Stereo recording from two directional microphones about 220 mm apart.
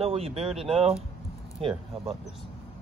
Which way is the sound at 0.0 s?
25° right (ahead or behind).